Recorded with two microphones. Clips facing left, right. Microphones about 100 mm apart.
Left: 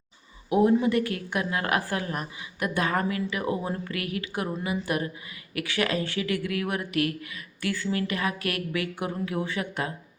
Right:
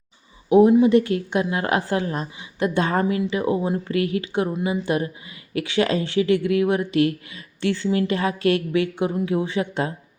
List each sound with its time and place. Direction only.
0.5 s a woman's voice: 20° right (ahead or behind)